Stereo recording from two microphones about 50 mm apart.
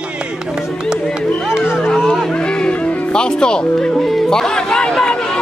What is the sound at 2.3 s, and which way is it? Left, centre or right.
Music, centre.